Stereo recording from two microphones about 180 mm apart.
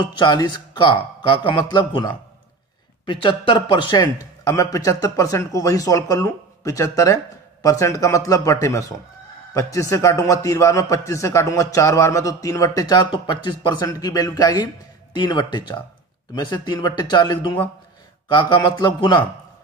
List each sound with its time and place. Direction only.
0.0 s a man's voice: 25° left (ahead or behind)